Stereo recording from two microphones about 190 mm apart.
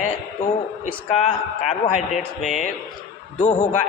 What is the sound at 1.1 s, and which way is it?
A man's voice, 35° left (ahead or behind).